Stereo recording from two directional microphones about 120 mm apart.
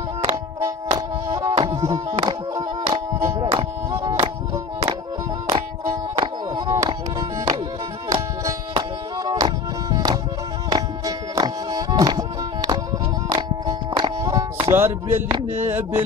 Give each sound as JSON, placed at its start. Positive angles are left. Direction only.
{"t": 0.3, "sound": "music", "side_deg": -25}
{"t": 5.5, "sound": "music", "side_deg": -40}
{"t": 8.7, "sound": "music", "side_deg": -35}
{"t": 15.4, "sound": "a sound", "side_deg": -15}